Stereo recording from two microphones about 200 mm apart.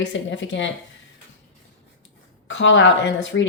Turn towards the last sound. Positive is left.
turn(degrees=65)  # may be behind; listen again after turning